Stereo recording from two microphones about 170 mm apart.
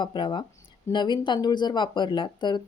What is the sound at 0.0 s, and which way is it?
Speech, 25° left (ahead or behind).